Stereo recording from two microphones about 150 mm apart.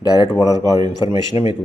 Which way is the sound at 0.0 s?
25° left (ahead or behind).